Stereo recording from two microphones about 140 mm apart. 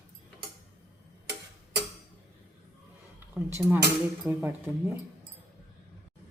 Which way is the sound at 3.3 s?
10° right (ahead or behind).